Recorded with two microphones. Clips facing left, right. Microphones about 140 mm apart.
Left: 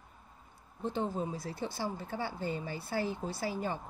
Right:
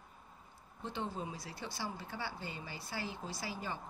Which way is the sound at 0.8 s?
45° left (ahead or behind).